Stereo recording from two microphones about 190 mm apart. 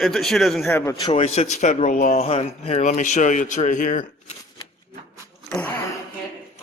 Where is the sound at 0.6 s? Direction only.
15° left (ahead or behind).